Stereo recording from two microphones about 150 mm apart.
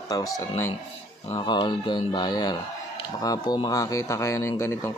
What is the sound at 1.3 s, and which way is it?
Speech, 30° left (ahead or behind).